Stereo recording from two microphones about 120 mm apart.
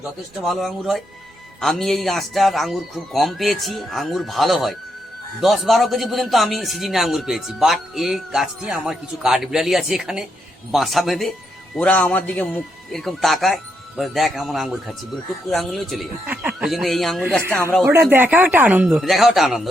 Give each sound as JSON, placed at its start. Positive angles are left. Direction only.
{"t": 0.3, "sound": "a man's voice", "side_deg": 0}
{"t": 11.7, "sound": "a man's voice", "side_deg": 10}
{"t": 16.2, "sound": "a man's voice", "side_deg": -10}
{"t": 17.5, "sound": "speech", "side_deg": 20}
{"t": 17.8, "sound": "speech", "side_deg": -20}